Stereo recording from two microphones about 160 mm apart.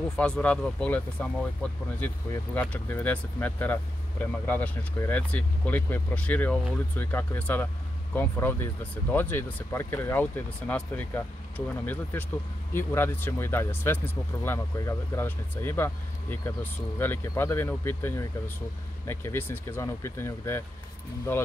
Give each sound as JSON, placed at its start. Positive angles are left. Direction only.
{"t": 0.1, "sound": "speech", "side_deg": 5}
{"t": 2.5, "sound": "speech", "side_deg": 10}